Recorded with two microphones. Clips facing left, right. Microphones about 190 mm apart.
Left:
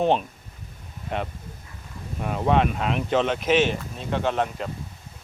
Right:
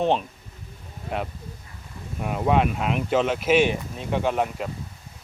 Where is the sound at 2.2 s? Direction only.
5° right (ahead or behind).